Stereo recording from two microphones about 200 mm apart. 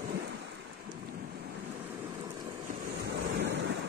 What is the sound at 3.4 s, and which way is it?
Waves, 60° right (ahead or behind).